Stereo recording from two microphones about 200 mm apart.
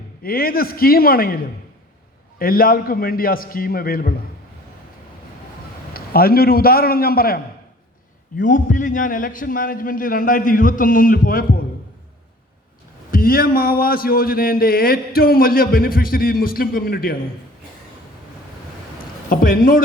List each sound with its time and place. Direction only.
0.2 s a man's voice: 45° left (ahead or behind)
2.4 s a man's voice: 45° left (ahead or behind)
5.9 s a man's voice: 50° left (ahead or behind)
13.1 s a man's voice: 45° left (ahead or behind)
19.3 s a man's voice: 45° left (ahead or behind)